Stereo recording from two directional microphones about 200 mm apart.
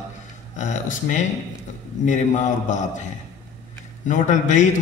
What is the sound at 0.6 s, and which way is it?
A man's voice, 35° left (ahead or behind).